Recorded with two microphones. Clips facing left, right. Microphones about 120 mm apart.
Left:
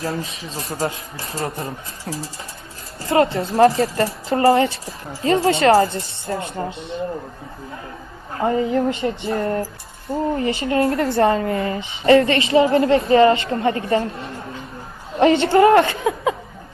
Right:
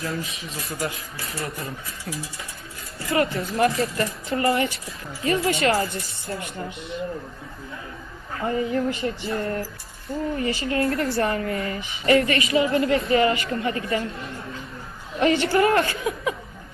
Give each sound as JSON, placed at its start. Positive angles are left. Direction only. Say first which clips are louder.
{"t": 0.0, "sound": "speech", "louder": "left 4 dB", "side_deg": 35}
{"t": 8.3, "sound": "a woman's voice", "louder": "left 5 dB", "side_deg": 35}